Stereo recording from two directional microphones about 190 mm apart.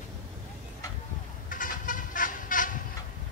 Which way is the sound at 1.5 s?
45° left (ahead or behind).